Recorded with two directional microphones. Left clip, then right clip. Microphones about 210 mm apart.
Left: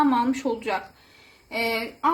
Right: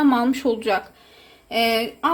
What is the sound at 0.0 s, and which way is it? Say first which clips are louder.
A woman's voice: right 3 dB; 50° right (ahead or behind).